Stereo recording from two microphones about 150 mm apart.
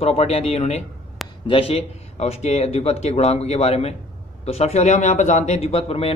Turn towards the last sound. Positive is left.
turn(degrees=40)  # may be behind; listen again after turning